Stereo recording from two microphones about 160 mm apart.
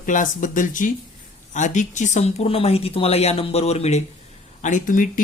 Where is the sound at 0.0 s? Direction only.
55° left (ahead or behind).